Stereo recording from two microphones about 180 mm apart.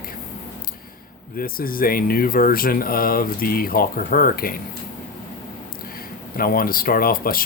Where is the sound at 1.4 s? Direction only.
55° left (ahead or behind).